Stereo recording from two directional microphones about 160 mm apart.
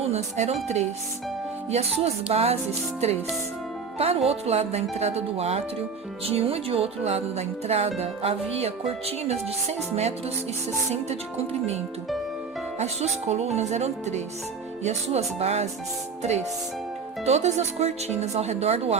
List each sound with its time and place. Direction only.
0.0 s speech: 45° right (ahead or behind)
3.9 s speech: 40° right (ahead or behind)
12.8 s speech: 45° right (ahead or behind)